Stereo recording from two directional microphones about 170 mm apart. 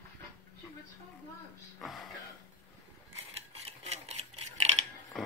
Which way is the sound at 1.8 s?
Centre (ahead or behind).